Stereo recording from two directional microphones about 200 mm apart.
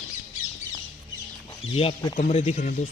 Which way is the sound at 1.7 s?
25° left (ahead or behind).